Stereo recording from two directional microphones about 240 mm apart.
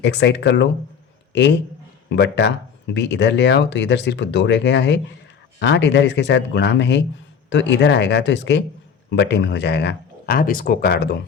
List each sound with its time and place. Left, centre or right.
0.0 s a man's voice: left